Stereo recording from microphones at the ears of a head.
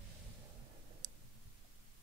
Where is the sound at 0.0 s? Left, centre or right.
Right.